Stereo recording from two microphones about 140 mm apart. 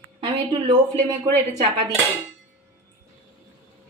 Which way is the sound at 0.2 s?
35° right (ahead or behind).